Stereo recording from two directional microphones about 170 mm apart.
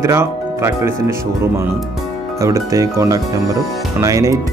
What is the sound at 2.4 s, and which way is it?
Speech, 20° right (ahead or behind).